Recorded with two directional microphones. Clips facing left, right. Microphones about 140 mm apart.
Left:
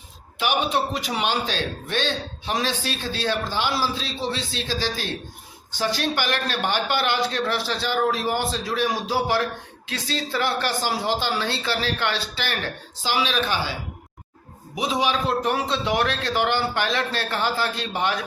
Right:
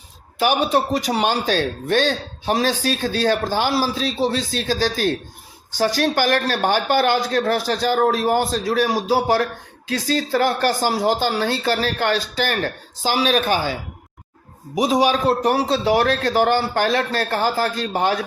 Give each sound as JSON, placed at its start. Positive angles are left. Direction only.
{"t": 0.3, "sound": "a man's voice", "side_deg": -40}
{"t": 14.8, "sound": "a man's voice", "side_deg": -40}